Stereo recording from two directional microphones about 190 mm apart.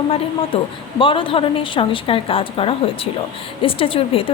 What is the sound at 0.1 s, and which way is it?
Speech, 30° left (ahead or behind).